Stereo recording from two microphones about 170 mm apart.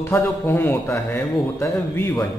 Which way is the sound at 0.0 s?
15° left (ahead or behind).